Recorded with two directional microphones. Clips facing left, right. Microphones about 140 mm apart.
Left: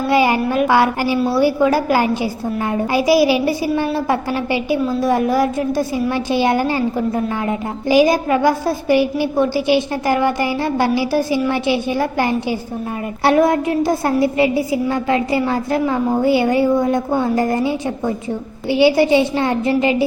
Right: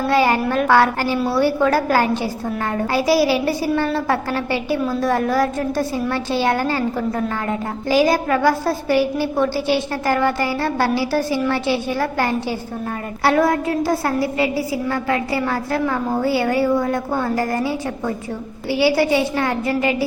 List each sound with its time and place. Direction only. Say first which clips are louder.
0.1 s a woman's voice: left 2 dB; 15° left (ahead or behind)